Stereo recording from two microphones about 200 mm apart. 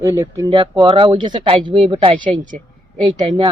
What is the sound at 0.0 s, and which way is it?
Speech, 15° right (ahead or behind).